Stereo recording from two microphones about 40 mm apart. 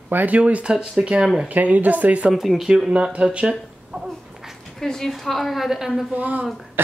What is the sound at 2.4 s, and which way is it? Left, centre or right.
Speech, centre.